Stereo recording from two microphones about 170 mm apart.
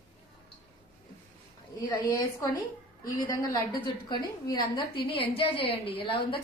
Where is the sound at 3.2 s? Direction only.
25° left (ahead or behind).